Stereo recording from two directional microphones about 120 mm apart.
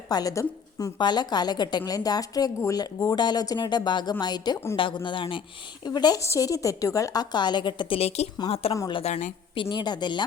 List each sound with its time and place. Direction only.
0.1 s a woman's voice: 30° left (ahead or behind); by 8.7 s 55° left (ahead or behind)
9.0 s a woman's voice: 65° left (ahead or behind)
9.6 s a woman's voice: 45° left (ahead or behind)